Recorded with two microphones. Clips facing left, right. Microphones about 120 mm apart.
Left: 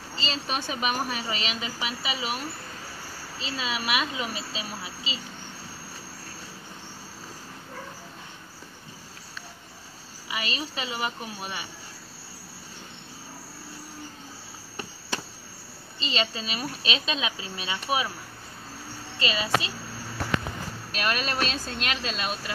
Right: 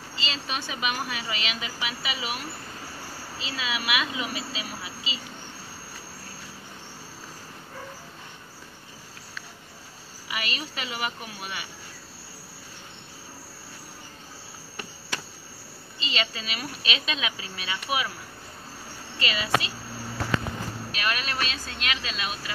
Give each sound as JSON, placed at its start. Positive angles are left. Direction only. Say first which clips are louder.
{"t": 0.1, "sound": "speech", "louder": "left 2 dB", "side_deg": 40}
{"t": 10.3, "sound": "speech", "louder": "left 1 dB", "side_deg": 30}
{"t": 16.0, "sound": "speech", "louder": "left 2 dB", "side_deg": 35}
{"t": 19.1, "sound": "speech", "louder": "even", "side_deg": 30}
{"t": 20.9, "sound": "speech", "louder": "left 3 dB", "side_deg": 35}
{"t": 22.1, "sound": "speech", "louder": "left 2 dB", "side_deg": -5}